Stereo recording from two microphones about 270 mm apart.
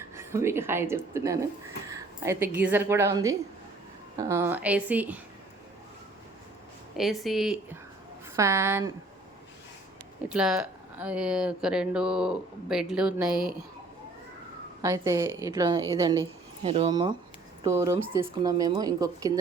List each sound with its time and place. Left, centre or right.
0.2 s a woman's voice: centre
6.9 s speech: centre
10.2 s speech: centre
14.8 s speech: centre